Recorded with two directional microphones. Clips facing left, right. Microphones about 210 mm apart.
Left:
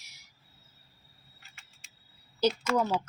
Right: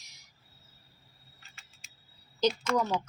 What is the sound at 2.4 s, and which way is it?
Speech, 10° left (ahead or behind).